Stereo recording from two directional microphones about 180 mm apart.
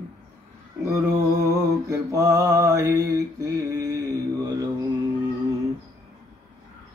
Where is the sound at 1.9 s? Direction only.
15° right (ahead or behind).